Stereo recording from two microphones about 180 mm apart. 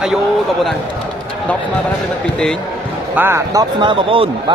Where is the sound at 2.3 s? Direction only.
5° left (ahead or behind).